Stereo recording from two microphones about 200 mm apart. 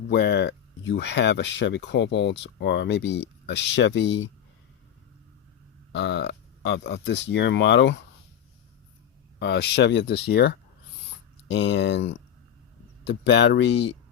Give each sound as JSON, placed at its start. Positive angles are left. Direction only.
{"t": 0.1, "sound": "speech", "side_deg": 60}
{"t": 5.9, "sound": "speech", "side_deg": 60}
{"t": 9.4, "sound": "speech", "side_deg": 55}